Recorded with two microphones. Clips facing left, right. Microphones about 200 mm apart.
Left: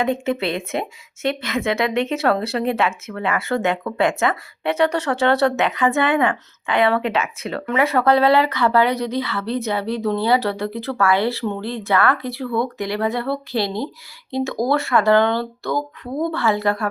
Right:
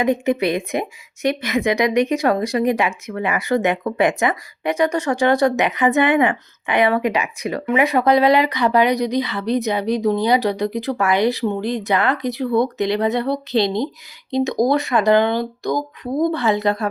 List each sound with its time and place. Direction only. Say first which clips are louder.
0.0 s a woman's voice: right 3 dB; 15° right (ahead or behind)